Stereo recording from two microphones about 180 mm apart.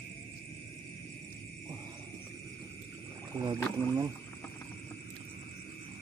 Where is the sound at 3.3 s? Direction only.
25° right (ahead or behind).